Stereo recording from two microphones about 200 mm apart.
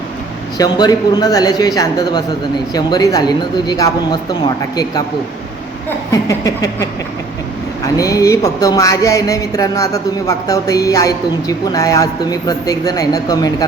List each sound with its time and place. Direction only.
0.6 s speech: 20° left (ahead or behind)
6.1 s speech: 15° left (ahead or behind)
7.9 s speech: 15° left (ahead or behind)